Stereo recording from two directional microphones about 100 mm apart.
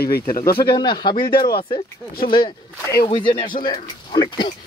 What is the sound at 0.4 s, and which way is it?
Speech, 45° left (ahead or behind).